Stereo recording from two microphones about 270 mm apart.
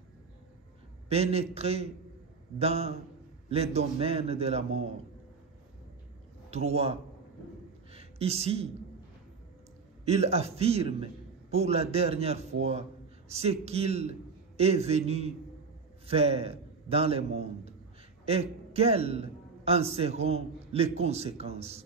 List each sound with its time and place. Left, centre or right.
1.0 s a man's voice: right
6.5 s a man's voice: right
7.9 s a sound: right
10.0 s a man's voice: right